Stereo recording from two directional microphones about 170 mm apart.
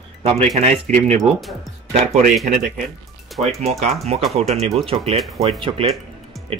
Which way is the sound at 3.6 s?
40° right (ahead or behind).